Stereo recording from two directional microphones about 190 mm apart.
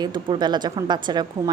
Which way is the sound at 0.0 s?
20° right (ahead or behind).